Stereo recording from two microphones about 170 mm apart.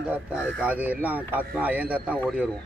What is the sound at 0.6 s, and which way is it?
A man's voice, 10° right (ahead or behind).